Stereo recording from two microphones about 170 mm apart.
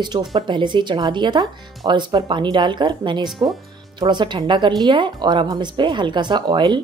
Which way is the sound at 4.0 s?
25° right (ahead or behind).